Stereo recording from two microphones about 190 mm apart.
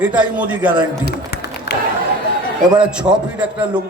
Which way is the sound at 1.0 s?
55° left (ahead or behind).